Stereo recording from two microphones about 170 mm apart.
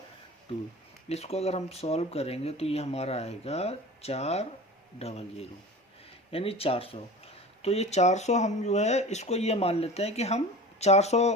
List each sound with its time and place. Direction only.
1.0 s speech: 40° left (ahead or behind)